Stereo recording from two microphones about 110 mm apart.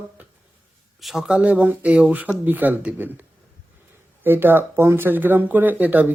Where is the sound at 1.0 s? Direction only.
Centre (ahead or behind).